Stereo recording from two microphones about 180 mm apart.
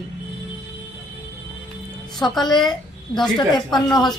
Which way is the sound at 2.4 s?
25° left (ahead or behind).